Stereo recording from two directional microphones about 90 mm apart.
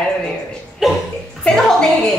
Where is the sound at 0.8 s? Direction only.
Centre (ahead or behind).